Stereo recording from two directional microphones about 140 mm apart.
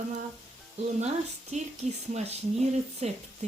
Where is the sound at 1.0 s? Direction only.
55° right (ahead or behind).